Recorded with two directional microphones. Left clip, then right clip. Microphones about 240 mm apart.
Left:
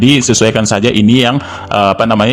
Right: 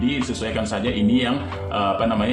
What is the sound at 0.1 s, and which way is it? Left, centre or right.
A man's voice, left.